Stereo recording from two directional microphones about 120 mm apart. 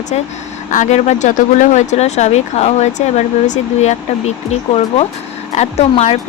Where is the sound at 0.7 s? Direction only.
80° left.